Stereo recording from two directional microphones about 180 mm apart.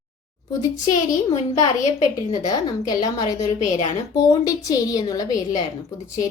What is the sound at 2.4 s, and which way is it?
A woman's voice, 20° left (ahead or behind).